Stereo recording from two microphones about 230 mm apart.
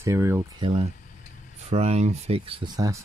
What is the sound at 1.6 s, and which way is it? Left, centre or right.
Speech, right.